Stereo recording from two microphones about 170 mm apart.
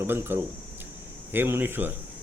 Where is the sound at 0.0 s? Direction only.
15° right (ahead or behind).